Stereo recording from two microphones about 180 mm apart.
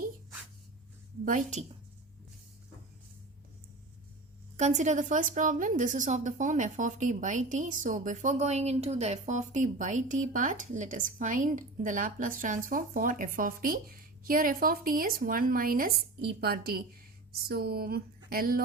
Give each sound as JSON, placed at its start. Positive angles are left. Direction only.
{"t": 1.2, "sound": "a woman's voice", "side_deg": -45}
{"t": 4.5, "sound": "a woman's voice", "side_deg": -40}